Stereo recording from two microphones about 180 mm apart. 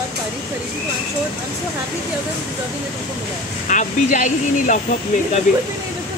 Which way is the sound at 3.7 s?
45° left (ahead or behind).